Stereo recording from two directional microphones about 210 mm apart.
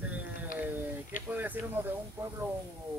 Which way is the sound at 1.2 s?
10° right (ahead or behind).